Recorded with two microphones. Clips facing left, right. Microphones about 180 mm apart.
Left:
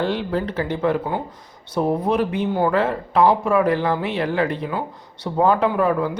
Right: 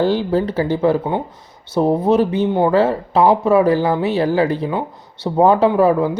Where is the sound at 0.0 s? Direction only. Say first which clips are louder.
Right 6 dB; 30° right (ahead or behind).